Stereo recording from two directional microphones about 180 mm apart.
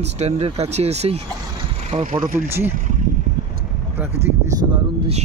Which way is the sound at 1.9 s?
45° right (ahead or behind).